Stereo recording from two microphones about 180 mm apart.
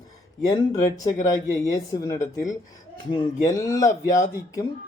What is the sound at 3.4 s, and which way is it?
Speech, 20° left (ahead or behind).